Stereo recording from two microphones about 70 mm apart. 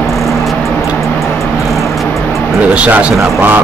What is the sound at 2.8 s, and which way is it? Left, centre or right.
Speech, right.